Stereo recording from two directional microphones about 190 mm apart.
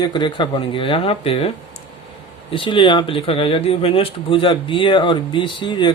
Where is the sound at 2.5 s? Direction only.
25° left (ahead or behind).